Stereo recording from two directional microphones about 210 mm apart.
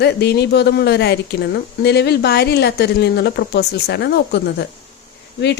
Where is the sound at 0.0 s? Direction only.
50° left (ahead or behind).